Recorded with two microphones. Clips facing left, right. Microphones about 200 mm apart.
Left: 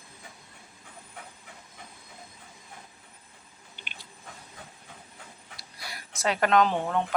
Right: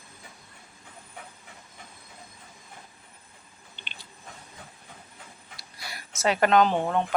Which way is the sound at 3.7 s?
5° left (ahead or behind).